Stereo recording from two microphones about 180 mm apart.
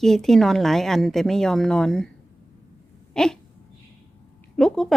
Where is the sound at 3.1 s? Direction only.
5° left (ahead or behind).